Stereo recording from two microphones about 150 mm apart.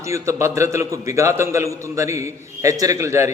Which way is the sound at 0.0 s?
20° right (ahead or behind).